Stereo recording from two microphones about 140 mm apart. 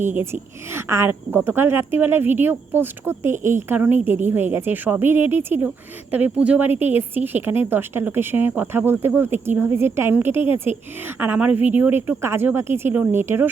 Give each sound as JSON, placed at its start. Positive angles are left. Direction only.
{"t": 0.0, "sound": "speech", "side_deg": -15}